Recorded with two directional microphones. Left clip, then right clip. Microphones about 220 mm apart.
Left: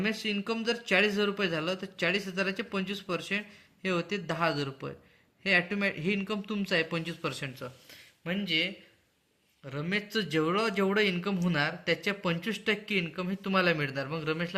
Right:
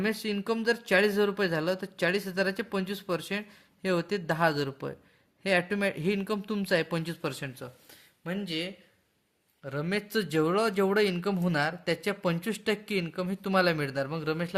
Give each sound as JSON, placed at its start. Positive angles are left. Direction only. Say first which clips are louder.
{"t": 0.0, "sound": "speech", "louder": "right 1 dB", "side_deg": -50}